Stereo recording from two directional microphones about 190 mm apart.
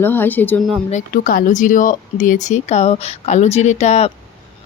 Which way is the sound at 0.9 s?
45° left (ahead or behind).